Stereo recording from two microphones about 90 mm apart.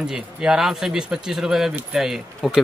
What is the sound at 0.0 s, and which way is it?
Speech, 5° right (ahead or behind).